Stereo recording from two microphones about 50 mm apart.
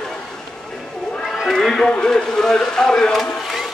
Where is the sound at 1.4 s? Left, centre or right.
Centre.